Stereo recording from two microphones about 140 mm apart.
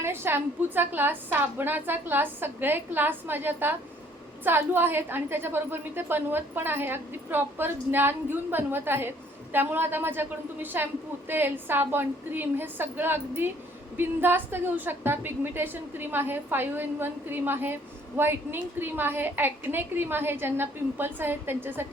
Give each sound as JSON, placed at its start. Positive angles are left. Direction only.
{"t": 0.0, "sound": "a woman's voice", "side_deg": -15}